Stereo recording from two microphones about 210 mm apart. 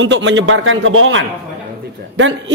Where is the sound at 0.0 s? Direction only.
60° right (ahead or behind).